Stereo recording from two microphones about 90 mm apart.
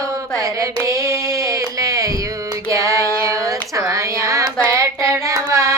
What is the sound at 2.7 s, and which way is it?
Music, 35° right (ahead or behind).